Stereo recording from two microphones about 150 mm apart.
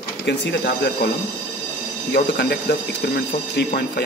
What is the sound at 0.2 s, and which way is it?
Speech, 90° left.